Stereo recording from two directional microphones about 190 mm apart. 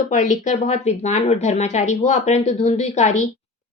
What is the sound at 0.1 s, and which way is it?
A woman's voice, 40° left (ahead or behind).